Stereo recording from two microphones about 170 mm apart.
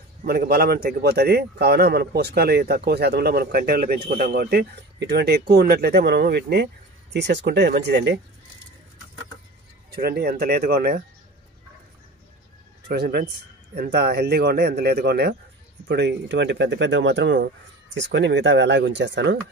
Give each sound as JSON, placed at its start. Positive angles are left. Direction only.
{"t": 0.2, "sound": "a man's voice", "side_deg": -60}
{"t": 9.8, "sound": "speech", "side_deg": -70}
{"t": 12.8, "sound": "a man's voice", "side_deg": -75}
{"t": 15.9, "sound": "speech", "side_deg": -85}